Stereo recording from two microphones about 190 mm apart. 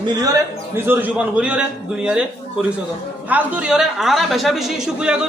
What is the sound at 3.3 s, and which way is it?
Speech, 10° right (ahead or behind).